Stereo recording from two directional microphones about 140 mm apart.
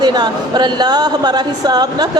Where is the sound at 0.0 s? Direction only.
30° right (ahead or behind).